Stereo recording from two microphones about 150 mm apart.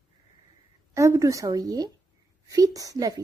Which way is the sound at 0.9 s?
20° right (ahead or behind).